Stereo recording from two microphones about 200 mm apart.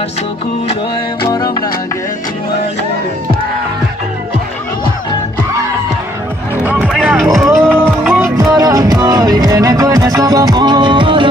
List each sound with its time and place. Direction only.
1.3 s music: 20° left (ahead or behind)
6.6 s music: 5° right (ahead or behind); by 11.2 s 25° right (ahead or behind)